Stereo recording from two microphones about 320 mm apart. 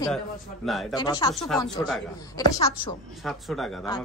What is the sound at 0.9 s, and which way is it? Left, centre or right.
Speech, centre.